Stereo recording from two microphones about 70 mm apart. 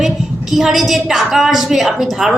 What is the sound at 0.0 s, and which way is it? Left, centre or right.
A woman's voice, centre.